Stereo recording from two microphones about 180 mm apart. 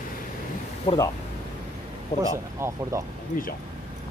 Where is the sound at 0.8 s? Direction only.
25° left (ahead or behind).